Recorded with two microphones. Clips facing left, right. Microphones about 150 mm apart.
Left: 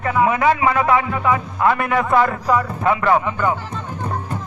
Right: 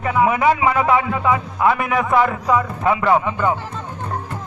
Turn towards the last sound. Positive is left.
turn(degrees=-15)  # may be behind; listen again after turning